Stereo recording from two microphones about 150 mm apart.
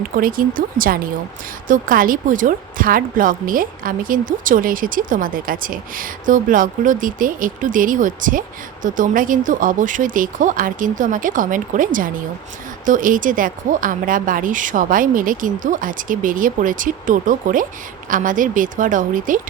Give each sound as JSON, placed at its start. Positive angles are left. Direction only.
{"t": 0.2, "sound": "speech", "side_deg": -70}